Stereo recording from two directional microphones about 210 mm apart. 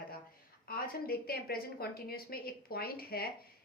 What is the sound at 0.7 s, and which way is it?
A woman's voice, 45° left (ahead or behind).